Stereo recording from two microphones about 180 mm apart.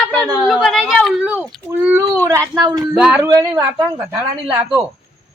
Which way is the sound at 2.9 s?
5° right (ahead or behind).